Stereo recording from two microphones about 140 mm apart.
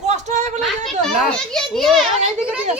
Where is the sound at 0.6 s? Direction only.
Centre (ahead or behind).